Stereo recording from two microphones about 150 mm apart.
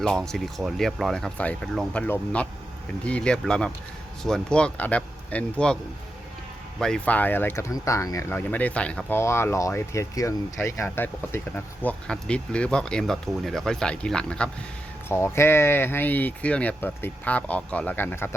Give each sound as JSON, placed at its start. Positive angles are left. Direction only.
{"t": 0.0, "sound": "speech", "side_deg": 5}
{"t": 6.7, "sound": "speech", "side_deg": 5}
{"t": 8.4, "sound": "speech", "side_deg": 10}
{"t": 15.1, "sound": "speech", "side_deg": 15}